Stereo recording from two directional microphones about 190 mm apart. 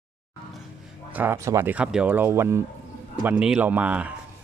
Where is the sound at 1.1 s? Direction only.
10° right (ahead or behind).